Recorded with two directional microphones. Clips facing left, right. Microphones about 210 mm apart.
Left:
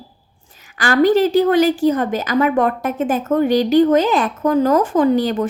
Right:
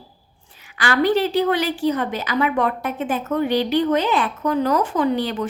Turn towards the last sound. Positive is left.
turn(degrees=45)  # may be behind; listen again after turning